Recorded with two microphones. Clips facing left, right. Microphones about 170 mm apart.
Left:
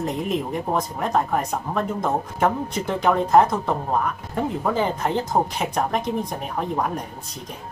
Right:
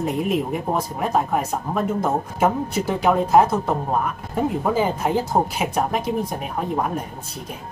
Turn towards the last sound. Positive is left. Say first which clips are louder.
# right 1 dB
turn(degrees=-5)  # may be behind; listen again after turning